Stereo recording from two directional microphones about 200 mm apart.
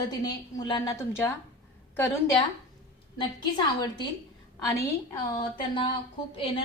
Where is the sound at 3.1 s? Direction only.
25° left (ahead or behind).